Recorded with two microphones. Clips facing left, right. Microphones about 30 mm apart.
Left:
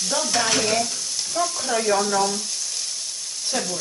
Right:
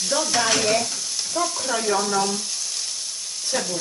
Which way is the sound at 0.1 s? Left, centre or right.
Centre.